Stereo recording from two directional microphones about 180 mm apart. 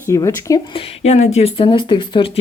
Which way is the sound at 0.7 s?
35° left (ahead or behind).